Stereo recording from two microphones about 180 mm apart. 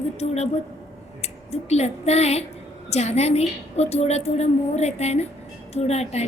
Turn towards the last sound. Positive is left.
turn(degrees=35)  # may be behind; listen again after turning